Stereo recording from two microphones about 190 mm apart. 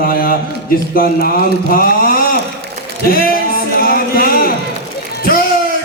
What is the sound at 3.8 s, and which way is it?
Music, 50° left (ahead or behind).